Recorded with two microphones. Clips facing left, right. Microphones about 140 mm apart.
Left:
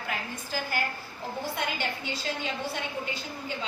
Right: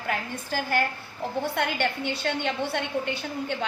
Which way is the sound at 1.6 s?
70° right (ahead or behind).